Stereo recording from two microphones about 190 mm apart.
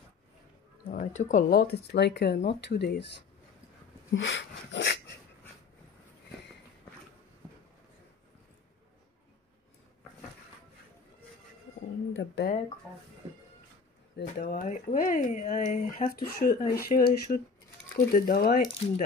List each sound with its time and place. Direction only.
0.9 s speech: 40° left (ahead or behind); by 3.1 s 55° left (ahead or behind)
4.1 s a sound: 75° left (ahead or behind)
12.2 s speech: 60° left (ahead or behind)
14.2 s speech: 50° left (ahead or behind)